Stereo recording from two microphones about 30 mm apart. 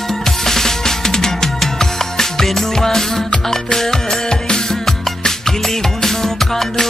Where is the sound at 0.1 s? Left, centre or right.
Centre.